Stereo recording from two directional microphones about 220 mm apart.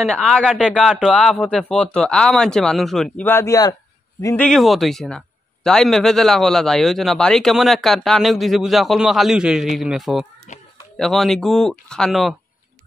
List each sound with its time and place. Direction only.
0.0 s a man's voice: centre (ahead or behind)
4.5 s a man's voice: centre (ahead or behind)
10.5 s speech: 35° left (ahead or behind)
11.0 s a man's voice: centre (ahead or behind)